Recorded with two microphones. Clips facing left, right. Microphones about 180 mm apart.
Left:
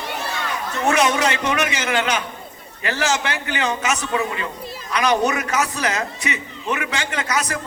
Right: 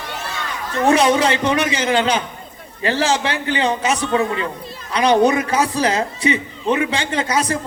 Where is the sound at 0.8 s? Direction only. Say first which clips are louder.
Right 4 dB; 30° right (ahead or behind).